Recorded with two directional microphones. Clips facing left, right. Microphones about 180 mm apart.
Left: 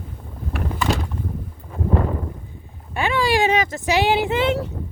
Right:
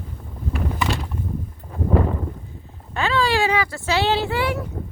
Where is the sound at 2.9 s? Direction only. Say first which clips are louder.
Left 1 dB; 15° left (ahead or behind).